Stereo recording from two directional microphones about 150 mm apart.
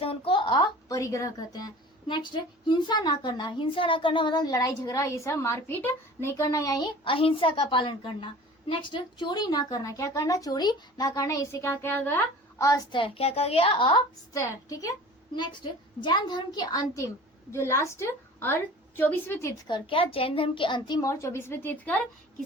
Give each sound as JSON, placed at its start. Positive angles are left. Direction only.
{"t": 0.0, "sound": "a sound", "side_deg": 35}
{"t": 0.9, "sound": "a woman's voice", "side_deg": 20}
{"t": 14.3, "sound": "a woman's voice", "side_deg": 20}
{"t": 19.6, "sound": "a woman's voice", "side_deg": 35}
{"t": 21.1, "sound": "a woman's voice", "side_deg": 15}